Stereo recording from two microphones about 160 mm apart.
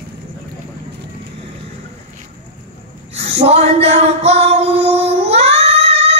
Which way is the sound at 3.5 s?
40° right (ahead or behind).